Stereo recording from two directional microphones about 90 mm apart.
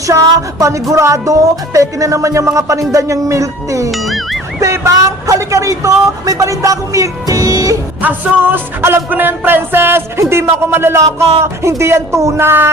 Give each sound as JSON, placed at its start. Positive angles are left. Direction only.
{"t": 0.1, "sound": "speech", "side_deg": -35}
{"t": 3.9, "sound": "music", "side_deg": 0}
{"t": 4.6, "sound": "speech", "side_deg": -35}
{"t": 8.0, "sound": "music", "side_deg": -20}